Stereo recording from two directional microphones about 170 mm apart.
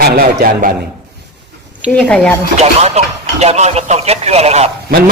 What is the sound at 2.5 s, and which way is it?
Speech, 40° right (ahead or behind).